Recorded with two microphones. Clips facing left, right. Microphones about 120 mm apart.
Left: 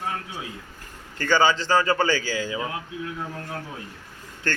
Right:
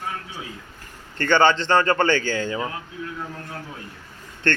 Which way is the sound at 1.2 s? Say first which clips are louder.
Right 3 dB; 5° left (ahead or behind).